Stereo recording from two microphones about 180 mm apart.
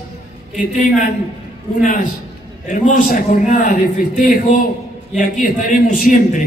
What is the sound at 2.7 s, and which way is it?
A man's voice, 45° left (ahead or behind).